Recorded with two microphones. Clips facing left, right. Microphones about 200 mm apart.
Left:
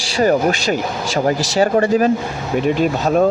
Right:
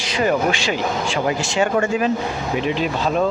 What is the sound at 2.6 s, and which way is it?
Speech, 45° left (ahead or behind).